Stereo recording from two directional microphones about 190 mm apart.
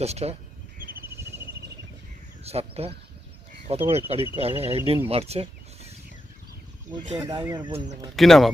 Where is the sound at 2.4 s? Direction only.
30° right (ahead or behind).